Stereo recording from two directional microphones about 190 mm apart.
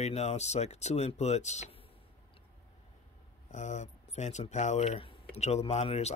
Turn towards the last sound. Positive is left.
turn(degrees=35)  # may be behind; listen again after turning